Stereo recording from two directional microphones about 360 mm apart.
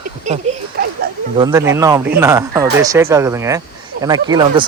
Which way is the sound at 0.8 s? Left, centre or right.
Right.